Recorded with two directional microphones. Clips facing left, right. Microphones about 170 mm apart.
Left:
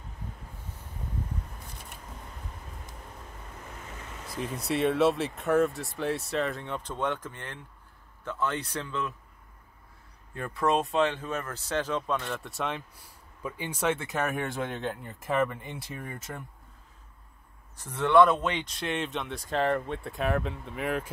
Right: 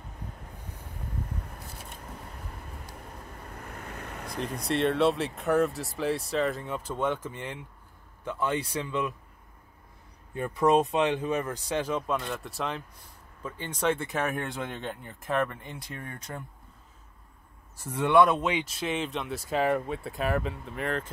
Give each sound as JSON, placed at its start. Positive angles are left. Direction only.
{"t": 3.6, "sound": "vehicle", "side_deg": -60}
{"t": 4.3, "sound": "speech", "side_deg": 5}
{"t": 10.3, "sound": "speech", "side_deg": -20}
{"t": 17.7, "sound": "speech", "side_deg": -10}